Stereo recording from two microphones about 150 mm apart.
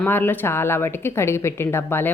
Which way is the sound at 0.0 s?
15° left (ahead or behind).